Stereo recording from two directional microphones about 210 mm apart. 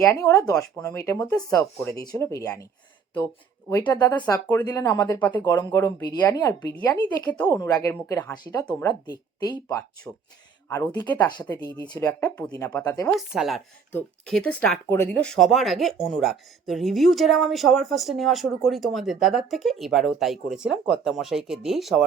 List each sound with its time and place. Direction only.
0.0 s speech: 15° left (ahead or behind)
3.7 s speech: 15° left (ahead or behind)
13.1 s speech: centre (ahead or behind)